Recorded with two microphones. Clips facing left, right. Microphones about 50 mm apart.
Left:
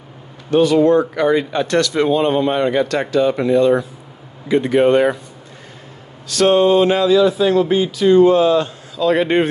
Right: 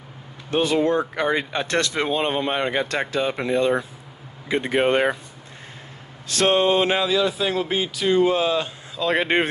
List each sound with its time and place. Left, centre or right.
0.5 s speech: right
6.2 s speech: right
7.1 s a man's voice: centre
8.9 s speech: right